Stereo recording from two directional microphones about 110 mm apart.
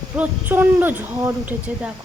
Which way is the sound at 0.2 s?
15° right (ahead or behind).